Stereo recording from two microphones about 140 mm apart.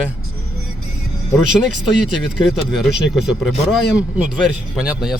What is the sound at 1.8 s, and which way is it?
Speech, centre (ahead or behind).